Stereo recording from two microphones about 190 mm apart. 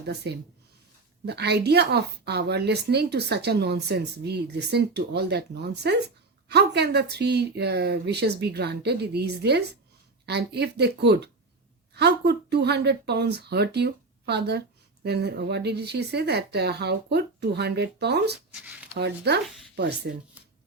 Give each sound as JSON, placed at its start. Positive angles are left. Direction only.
{"t": 1.2, "sound": "speech", "side_deg": -60}
{"t": 18.5, "sound": "speech", "side_deg": -5}
{"t": 18.9, "sound": "speech", "side_deg": -60}